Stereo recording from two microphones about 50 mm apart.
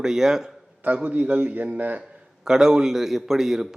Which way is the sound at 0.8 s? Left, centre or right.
Right.